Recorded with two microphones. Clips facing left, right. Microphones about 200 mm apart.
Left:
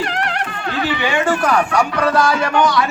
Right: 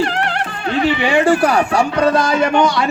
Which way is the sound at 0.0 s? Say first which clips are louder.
Right 3 dB; 30° right (ahead or behind).